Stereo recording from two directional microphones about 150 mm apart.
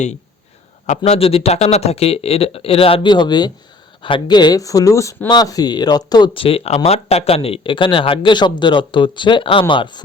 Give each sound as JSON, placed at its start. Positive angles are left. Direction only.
{"t": 0.9, "sound": "speech", "side_deg": 45}